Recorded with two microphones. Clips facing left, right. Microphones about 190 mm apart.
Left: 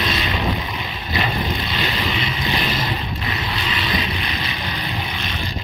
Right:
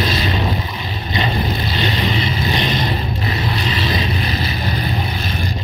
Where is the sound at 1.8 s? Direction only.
35° right (ahead or behind).